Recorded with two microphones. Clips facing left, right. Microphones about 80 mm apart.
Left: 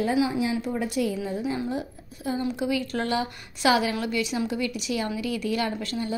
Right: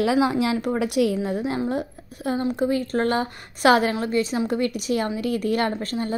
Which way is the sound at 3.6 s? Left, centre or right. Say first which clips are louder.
Right 5 dB; right.